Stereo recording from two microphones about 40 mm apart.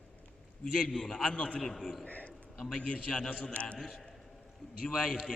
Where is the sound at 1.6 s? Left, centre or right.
Centre.